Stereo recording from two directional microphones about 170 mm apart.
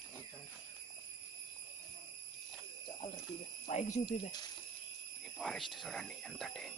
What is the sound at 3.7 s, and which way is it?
Speech, 45° left (ahead or behind).